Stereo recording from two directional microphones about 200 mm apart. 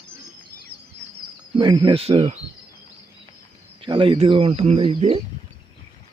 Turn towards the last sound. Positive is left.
turn(degrees=-30)  # may be behind; listen again after turning